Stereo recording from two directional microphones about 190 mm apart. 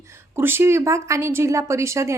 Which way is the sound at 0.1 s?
10° right (ahead or behind).